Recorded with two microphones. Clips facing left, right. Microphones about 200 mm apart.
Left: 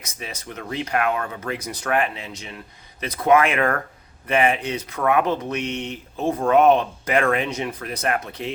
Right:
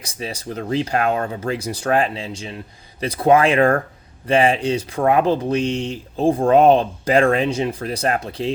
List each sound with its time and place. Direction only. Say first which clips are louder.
0.0 s speech: right 6 dB; 30° right (ahead or behind)